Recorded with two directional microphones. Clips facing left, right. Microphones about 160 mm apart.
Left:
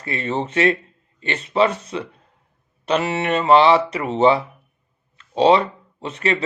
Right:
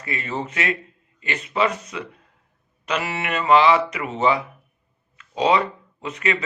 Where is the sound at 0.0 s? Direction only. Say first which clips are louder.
Left 4 dB; 30° left (ahead or behind).